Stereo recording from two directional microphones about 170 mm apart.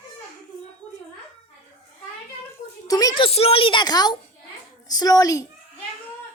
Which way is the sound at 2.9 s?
20° left (ahead or behind).